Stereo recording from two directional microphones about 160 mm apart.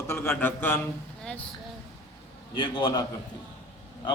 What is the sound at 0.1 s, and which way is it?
Speech, 15° left (ahead or behind).